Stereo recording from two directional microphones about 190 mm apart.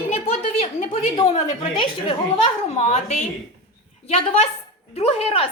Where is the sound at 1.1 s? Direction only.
20° left (ahead or behind).